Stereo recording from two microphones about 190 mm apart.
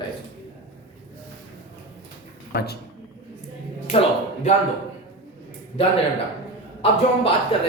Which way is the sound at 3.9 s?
30° left (ahead or behind).